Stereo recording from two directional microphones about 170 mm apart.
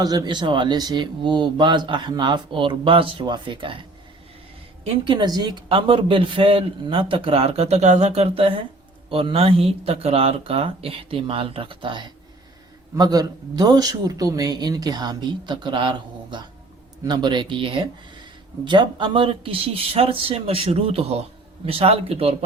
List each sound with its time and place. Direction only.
0.0 s a woman's voice: 20° right (ahead or behind)